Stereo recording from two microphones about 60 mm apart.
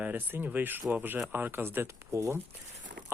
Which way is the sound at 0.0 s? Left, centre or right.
Right.